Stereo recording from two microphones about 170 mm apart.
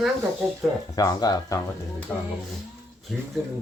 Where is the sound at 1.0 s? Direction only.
20° left (ahead or behind).